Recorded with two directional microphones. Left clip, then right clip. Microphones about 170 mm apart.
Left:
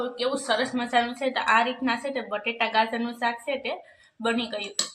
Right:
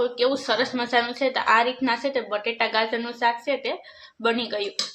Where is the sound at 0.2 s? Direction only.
50° right (ahead or behind).